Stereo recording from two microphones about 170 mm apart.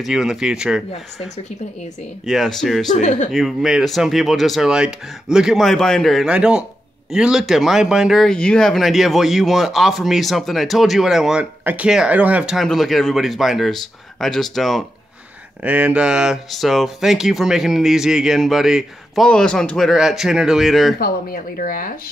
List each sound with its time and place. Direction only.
0.0 s speech: 5° right (ahead or behind)
2.2 s speech: centre (ahead or behind)
2.9 s speech: 45° left (ahead or behind)
3.3 s speech: centre (ahead or behind)
21.0 s speech: 60° left (ahead or behind)